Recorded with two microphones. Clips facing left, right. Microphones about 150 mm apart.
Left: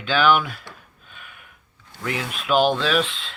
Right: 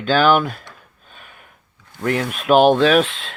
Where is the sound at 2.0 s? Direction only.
50° right (ahead or behind).